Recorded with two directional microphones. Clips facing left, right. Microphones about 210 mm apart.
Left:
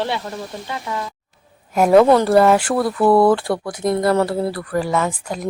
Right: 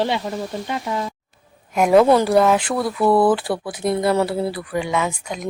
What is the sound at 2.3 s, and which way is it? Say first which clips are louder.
A woman's voice: left 3 dB; 5° left (ahead or behind).